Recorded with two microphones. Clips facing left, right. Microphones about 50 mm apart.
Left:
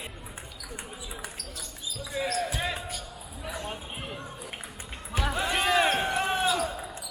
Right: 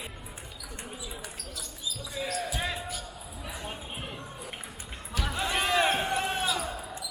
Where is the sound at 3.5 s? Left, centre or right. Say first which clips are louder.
Left 2 dB; centre.